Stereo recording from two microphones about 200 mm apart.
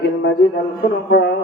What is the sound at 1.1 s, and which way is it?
Speech, 55° left (ahead or behind).